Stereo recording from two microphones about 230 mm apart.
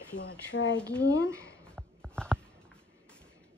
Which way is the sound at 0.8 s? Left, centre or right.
Centre.